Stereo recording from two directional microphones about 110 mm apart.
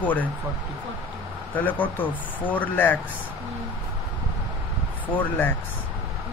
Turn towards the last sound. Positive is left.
turn(degrees=15)  # may be behind; listen again after turning